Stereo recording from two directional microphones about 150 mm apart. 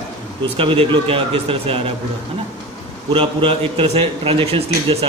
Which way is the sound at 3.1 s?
40° right (ahead or behind).